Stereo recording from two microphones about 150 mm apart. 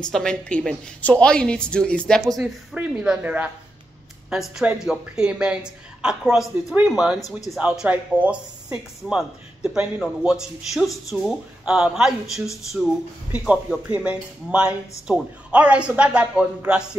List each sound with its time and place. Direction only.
0.1 s a woman's voice: 5° left (ahead or behind)
2.4 s speech: 10° right (ahead or behind)
7.2 s speech: 20° left (ahead or behind)
7.5 s speech: 5° right (ahead or behind)